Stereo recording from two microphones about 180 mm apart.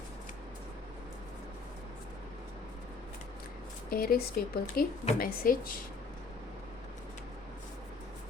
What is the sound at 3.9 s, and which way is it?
A woman's voice, 55° left (ahead or behind).